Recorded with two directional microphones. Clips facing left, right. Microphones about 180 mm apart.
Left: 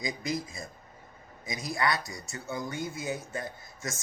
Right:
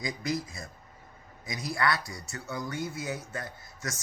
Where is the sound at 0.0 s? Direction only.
20° left (ahead or behind).